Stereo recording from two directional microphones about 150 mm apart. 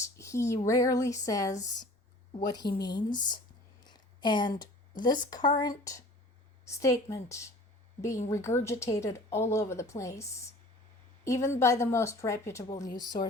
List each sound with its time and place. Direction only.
0.0 s speech: 20° left (ahead or behind)
3.8 s a sound: 30° left (ahead or behind)
5.3 s speech: 25° left (ahead or behind)